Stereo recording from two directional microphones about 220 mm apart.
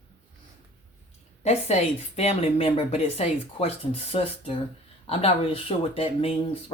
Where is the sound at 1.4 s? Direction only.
30° left (ahead or behind).